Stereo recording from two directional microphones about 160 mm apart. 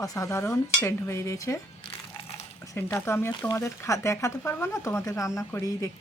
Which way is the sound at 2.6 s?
20° left (ahead or behind).